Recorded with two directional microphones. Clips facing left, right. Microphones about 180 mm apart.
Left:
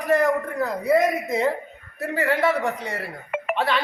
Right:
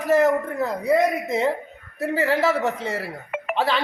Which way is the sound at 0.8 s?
Centre (ahead or behind).